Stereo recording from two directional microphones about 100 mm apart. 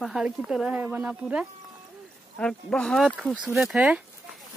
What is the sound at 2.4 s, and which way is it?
Speech, 5° left (ahead or behind).